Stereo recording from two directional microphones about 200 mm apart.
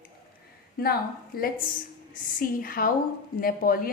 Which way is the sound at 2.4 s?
45° left (ahead or behind).